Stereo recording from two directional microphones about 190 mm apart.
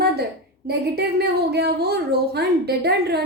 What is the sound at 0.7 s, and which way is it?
A woman's voice, 55° right (ahead or behind).